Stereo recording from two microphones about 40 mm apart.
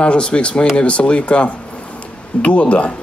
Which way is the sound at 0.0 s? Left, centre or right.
Left.